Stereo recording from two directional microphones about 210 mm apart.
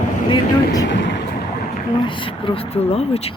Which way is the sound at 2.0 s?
25° left (ahead or behind).